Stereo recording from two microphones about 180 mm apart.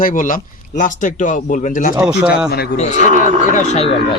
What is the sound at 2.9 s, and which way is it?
Speech, 45° right (ahead or behind).